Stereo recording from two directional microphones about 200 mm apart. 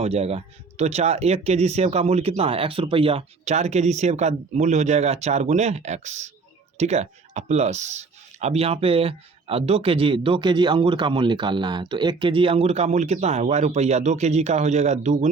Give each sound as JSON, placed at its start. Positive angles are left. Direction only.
{"t": 0.0, "sound": "speech", "side_deg": -30}